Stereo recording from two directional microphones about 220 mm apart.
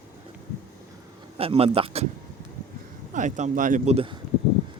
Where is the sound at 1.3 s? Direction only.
25° right (ahead or behind).